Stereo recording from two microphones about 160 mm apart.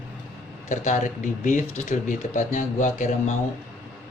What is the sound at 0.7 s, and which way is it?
A man's voice, 50° left (ahead or behind).